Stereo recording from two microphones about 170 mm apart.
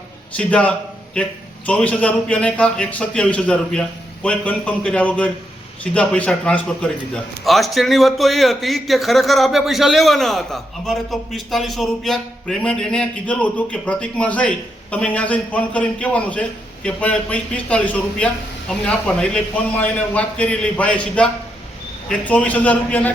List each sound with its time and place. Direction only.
0.3 s a man's voice: 5° left (ahead or behind)